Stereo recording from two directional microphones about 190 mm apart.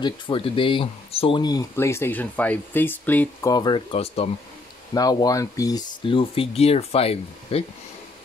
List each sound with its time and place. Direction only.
0.0 s speech: 25° left (ahead or behind); by 3.5 s 10° left (ahead or behind)
3.5 s speech: 25° left (ahead or behind)
4.9 s speech: 20° left (ahead or behind)